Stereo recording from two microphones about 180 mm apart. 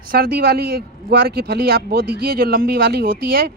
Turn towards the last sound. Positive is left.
turn(degrees=-55)  # may be behind; listen again after turning